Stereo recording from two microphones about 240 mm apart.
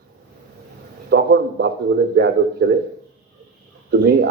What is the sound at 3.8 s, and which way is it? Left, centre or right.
Speech, right.